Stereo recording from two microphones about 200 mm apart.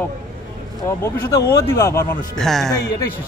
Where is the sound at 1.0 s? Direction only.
20° left (ahead or behind).